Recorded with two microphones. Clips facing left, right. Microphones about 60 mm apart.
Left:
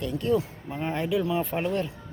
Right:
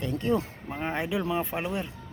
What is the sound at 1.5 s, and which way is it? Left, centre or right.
Speech, centre.